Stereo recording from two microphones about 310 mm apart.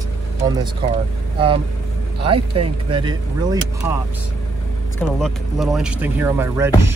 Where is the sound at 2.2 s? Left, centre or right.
Centre.